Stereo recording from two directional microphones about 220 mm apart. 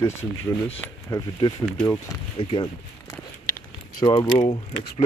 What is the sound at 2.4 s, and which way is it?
Speech, 25° left (ahead or behind).